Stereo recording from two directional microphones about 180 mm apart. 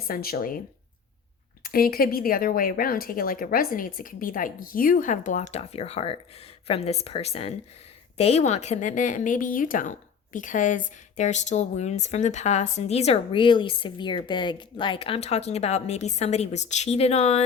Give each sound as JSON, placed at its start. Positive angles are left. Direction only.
{"t": 0.1, "sound": "speech", "side_deg": 55}
{"t": 1.6, "sound": "a woman's voice", "side_deg": 55}